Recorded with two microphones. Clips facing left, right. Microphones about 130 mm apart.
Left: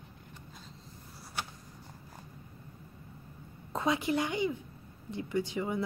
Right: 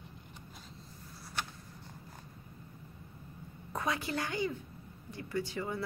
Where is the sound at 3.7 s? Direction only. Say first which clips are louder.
Left 5 dB; 20° left (ahead or behind).